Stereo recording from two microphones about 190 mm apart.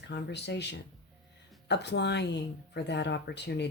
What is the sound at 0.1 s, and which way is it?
Speech, 65° left (ahead or behind).